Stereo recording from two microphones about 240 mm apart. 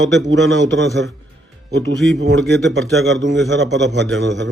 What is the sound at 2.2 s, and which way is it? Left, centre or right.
A man's voice, right.